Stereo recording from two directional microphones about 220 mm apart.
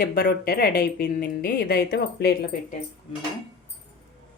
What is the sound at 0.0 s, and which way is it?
A woman's voice, 40° left (ahead or behind).